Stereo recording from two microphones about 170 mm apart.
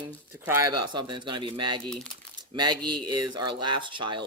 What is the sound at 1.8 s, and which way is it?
Speech, 5° left (ahead or behind).